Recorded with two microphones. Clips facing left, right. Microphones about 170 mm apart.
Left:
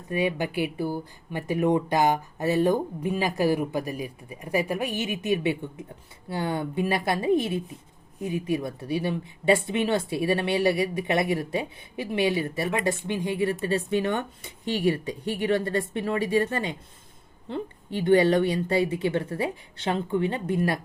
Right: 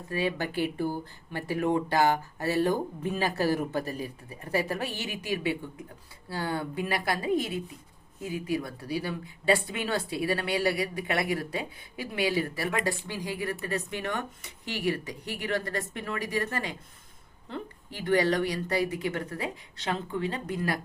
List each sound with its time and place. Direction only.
0.1 s speech: 15° left (ahead or behind)